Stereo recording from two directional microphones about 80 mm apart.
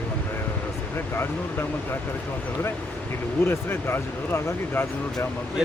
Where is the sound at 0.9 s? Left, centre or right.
Left.